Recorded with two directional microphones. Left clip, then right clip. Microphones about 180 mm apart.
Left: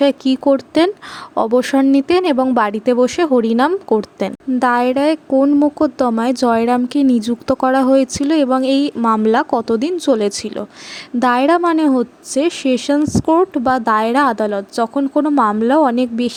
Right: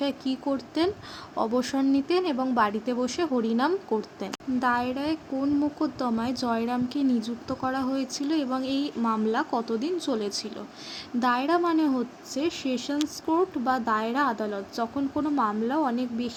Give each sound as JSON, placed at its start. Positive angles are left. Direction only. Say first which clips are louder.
{"t": 0.0, "sound": "speech", "louder": "left 15 dB", "side_deg": 55}